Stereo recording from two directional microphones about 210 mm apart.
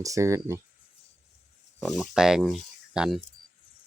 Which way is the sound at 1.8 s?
Centre (ahead or behind).